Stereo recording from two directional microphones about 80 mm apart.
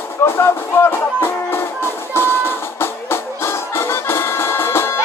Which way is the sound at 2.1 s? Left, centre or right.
Left.